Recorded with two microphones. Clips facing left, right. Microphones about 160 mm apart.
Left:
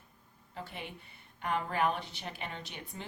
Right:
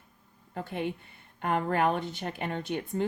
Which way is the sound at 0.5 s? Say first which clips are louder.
Right 10 dB; 50° right (ahead or behind).